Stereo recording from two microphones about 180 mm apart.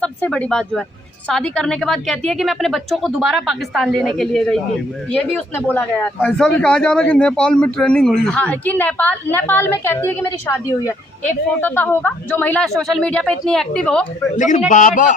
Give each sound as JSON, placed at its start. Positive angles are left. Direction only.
{"t": 0.0, "sound": "a woman's voice", "side_deg": 5}
{"t": 5.7, "sound": "a man's voice", "side_deg": 10}
{"t": 14.3, "sound": "a man's voice", "side_deg": 45}